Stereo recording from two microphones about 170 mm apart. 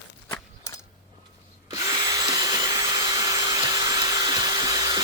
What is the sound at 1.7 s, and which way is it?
Drill, 20° right (ahead or behind).